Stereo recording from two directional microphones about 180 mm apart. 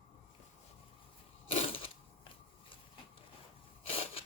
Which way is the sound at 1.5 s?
30° left (ahead or behind).